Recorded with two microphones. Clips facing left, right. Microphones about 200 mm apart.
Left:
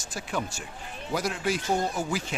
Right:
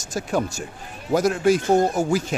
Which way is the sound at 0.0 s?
45° right (ahead or behind).